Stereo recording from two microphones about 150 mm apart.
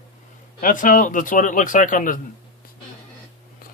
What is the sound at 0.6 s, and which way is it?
Speech, 65° left (ahead or behind).